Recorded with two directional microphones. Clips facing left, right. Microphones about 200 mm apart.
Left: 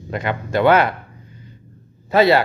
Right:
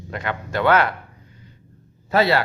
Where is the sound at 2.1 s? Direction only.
20° left (ahead or behind).